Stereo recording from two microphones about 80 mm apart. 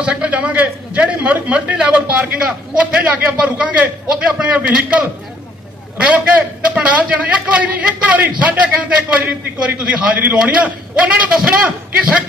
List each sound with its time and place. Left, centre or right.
0.0 s a man's voice: centre